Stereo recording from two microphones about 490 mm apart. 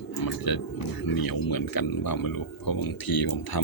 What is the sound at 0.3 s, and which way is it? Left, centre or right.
Speech, left.